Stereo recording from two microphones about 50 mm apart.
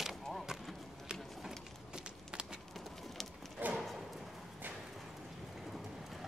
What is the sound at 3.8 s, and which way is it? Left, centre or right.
Clip-clop, centre.